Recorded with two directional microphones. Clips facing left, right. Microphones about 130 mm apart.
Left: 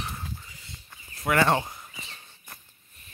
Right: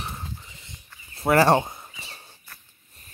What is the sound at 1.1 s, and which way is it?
Speech, 35° right (ahead or behind).